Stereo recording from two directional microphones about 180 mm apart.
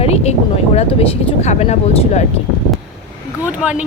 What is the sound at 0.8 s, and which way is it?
Speech, 35° left (ahead or behind).